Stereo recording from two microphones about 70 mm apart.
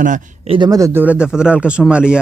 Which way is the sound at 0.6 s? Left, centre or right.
Right.